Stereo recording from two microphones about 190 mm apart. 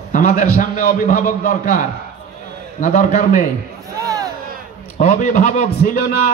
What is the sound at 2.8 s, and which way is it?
Speech, 40° left (ahead or behind).